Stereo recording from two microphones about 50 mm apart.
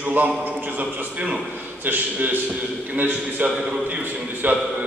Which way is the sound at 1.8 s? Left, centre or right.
Right.